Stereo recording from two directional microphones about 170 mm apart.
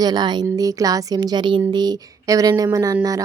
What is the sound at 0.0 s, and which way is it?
Speech, 25° right (ahead or behind).